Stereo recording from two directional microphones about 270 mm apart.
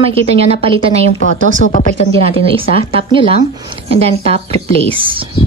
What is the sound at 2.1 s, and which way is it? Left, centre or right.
A woman's voice, centre.